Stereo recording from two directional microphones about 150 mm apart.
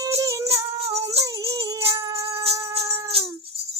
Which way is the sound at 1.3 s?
25° right (ahead or behind).